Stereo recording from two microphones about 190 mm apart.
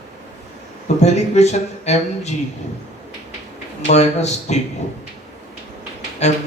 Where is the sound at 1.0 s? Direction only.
35° left (ahead or behind).